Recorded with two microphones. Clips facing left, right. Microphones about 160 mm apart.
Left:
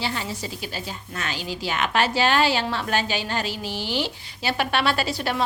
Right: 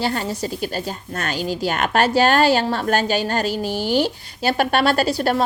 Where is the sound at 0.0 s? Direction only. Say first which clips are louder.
Right 6 dB; 45° right (ahead or behind).